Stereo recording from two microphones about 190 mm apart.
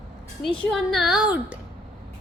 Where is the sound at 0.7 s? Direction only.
Centre (ahead or behind).